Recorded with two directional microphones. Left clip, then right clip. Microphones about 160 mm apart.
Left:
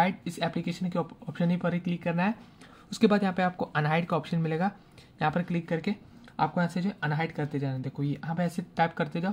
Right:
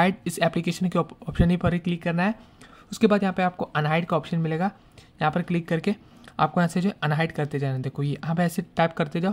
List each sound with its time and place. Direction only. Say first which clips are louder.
0.0 s speech: right 5 dB; 40° right (ahead or behind)
2.9 s speech: right 4 dB; 20° right (ahead or behind); by 9.3 s 35° right (ahead or behind)